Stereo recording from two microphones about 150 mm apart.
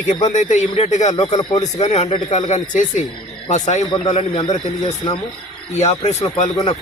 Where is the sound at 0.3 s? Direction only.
55° left (ahead or behind).